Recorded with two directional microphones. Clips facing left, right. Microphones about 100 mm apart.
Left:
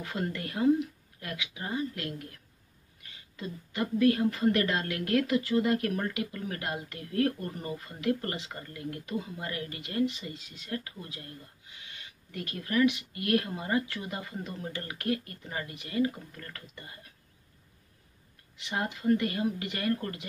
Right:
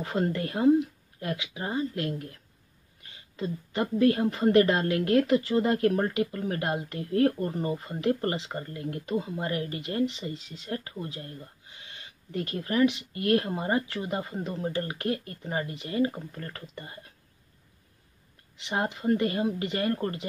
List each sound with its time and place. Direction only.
0.0 s speech: 30° right (ahead or behind)
18.6 s speech: 30° right (ahead or behind)